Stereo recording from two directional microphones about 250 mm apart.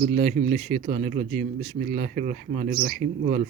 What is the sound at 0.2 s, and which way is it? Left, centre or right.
Speech, right.